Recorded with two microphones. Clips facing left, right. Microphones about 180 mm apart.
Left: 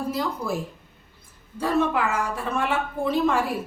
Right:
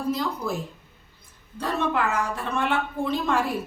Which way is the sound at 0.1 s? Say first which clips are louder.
Even; 5° left (ahead or behind).